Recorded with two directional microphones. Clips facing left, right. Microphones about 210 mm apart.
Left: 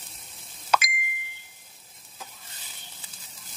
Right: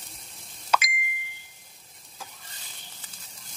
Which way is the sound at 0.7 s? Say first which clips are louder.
Left 1 dB; 45° left (ahead or behind).